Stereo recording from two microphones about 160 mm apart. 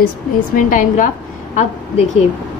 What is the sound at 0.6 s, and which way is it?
Speech, 55° left (ahead or behind).